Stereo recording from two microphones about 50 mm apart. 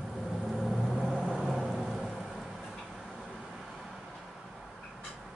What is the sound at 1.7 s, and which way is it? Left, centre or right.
Rain, centre.